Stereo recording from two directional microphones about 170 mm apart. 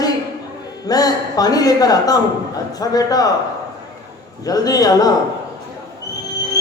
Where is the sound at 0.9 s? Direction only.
20° left (ahead or behind).